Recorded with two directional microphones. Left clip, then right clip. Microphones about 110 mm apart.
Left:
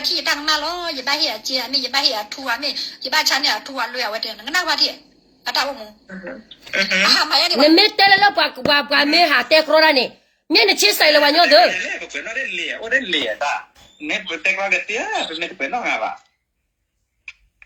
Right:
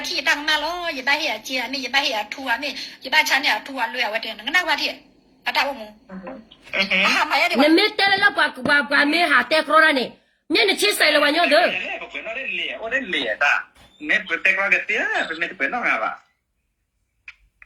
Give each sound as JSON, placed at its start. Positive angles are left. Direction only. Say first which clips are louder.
{"t": 0.0, "sound": "a sound", "louder": "left 1 dB", "side_deg": 5}
{"t": 0.4, "sound": "a woman's voice", "louder": "left 1 dB", "side_deg": 10}
{"t": 6.1, "sound": "speech", "louder": "left 4 dB", "side_deg": 40}
{"t": 6.7, "sound": "speech", "louder": "left 3 dB", "side_deg": 60}
{"t": 7.3, "sound": "a woman's voice", "louder": "left 2 dB", "side_deg": 75}
{"t": 7.7, "sound": "a woman's voice", "louder": "left 5 dB", "side_deg": -25}
{"t": 11.7, "sound": "speech", "louder": "left 3 dB", "side_deg": 50}
{"t": 13.2, "sound": "speech", "louder": "right 2 dB", "side_deg": -20}
{"t": 14.0, "sound": "speech", "louder": "right 2 dB", "side_deg": -5}